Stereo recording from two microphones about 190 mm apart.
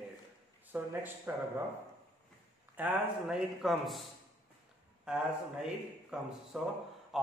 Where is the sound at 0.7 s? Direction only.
10° right (ahead or behind).